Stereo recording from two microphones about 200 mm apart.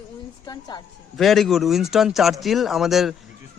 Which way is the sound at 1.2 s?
Centre (ahead or behind).